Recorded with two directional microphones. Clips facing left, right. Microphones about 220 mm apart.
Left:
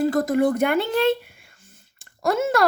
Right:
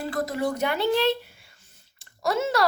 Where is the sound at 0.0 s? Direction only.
45° left (ahead or behind).